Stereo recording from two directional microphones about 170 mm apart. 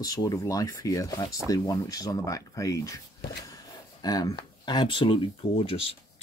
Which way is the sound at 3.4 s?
20° left (ahead or behind).